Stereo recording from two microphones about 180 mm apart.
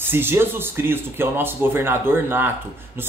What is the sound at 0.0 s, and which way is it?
Speech, 10° right (ahead or behind).